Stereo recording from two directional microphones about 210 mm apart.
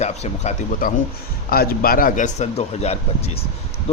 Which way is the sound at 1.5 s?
45° left (ahead or behind).